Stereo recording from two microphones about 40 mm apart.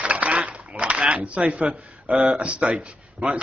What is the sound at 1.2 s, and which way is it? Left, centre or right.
Speech, right.